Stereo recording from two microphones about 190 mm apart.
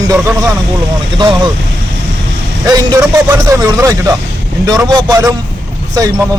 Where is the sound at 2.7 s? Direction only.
20° right (ahead or behind).